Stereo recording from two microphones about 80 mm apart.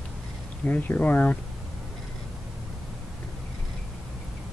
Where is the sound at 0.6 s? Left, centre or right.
Centre.